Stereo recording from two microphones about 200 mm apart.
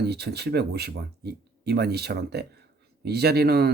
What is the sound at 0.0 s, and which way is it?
Speech, 55° right (ahead or behind).